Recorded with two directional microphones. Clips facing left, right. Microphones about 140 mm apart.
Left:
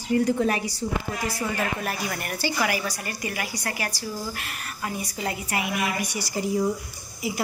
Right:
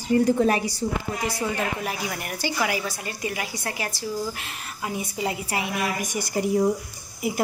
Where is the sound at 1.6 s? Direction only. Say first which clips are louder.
Even; 15° right (ahead or behind).